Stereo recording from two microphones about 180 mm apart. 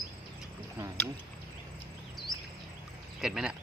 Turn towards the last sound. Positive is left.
turn(degrees=-5)  # may be behind; listen again after turning